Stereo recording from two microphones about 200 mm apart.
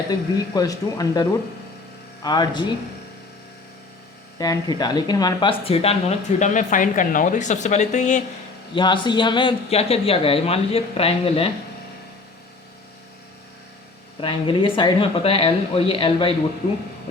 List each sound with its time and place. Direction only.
0.1 s speech: 20° left (ahead or behind)
4.4 s speech: 20° left (ahead or behind); by 8.2 s 35° left (ahead or behind)
8.7 s speech: 25° left (ahead or behind)
14.2 s speech: 25° left (ahead or behind)